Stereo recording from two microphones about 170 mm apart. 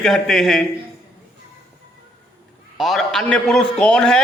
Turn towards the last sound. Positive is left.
turn(degrees=5)  # may be behind; listen again after turning